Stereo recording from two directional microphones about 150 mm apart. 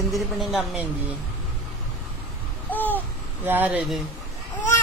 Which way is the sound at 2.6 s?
10° left (ahead or behind).